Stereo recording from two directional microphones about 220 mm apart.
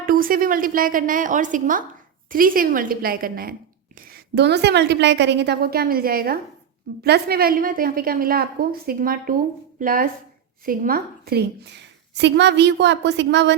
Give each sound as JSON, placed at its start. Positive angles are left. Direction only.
{"t": 0.0, "sound": "a woman's voice", "side_deg": -40}